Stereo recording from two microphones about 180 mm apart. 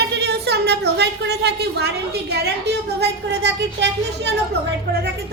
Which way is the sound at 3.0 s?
75° right (ahead or behind).